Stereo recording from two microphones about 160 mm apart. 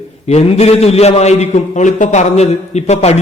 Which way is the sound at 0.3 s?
40° left (ahead or behind).